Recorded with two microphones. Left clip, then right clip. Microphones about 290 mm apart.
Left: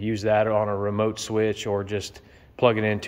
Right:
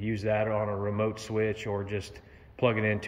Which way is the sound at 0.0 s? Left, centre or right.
Left.